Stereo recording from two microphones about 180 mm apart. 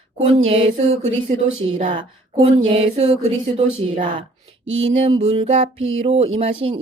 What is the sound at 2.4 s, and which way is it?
Speech, 35° right (ahead or behind).